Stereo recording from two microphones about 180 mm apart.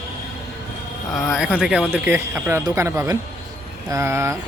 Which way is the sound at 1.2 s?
5° right (ahead or behind).